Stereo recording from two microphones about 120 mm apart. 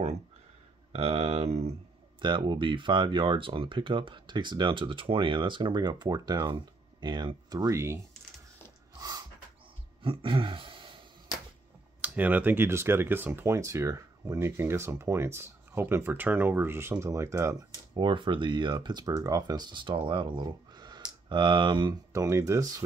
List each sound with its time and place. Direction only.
0.9 s speech: 60° right (ahead or behind)
2.1 s speech: 45° right (ahead or behind); by 8.0 s 25° right (ahead or behind)
10.0 s a sound: 45° right (ahead or behind)
12.0 s speech: 15° right (ahead or behind)
17.9 s speech: 40° right (ahead or behind)
22.1 s speech: 25° right (ahead or behind)